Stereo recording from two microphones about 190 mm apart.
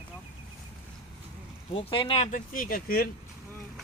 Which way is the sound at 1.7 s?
30° left (ahead or behind).